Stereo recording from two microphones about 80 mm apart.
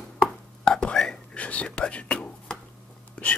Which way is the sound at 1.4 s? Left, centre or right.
Centre.